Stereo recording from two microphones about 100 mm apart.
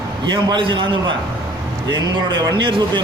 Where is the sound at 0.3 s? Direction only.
50° right (ahead or behind).